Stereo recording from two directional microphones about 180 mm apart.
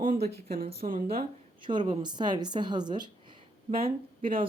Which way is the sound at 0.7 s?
50° right (ahead or behind).